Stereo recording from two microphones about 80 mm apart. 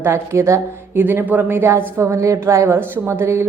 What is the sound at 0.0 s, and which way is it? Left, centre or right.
A woman's voice, right.